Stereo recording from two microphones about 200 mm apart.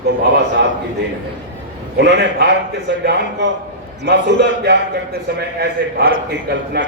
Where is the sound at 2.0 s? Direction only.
60° right (ahead or behind).